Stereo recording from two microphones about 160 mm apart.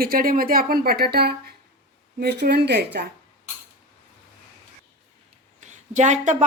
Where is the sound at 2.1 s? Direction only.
85° right.